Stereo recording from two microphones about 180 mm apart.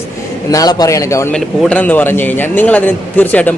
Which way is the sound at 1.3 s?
5° left (ahead or behind).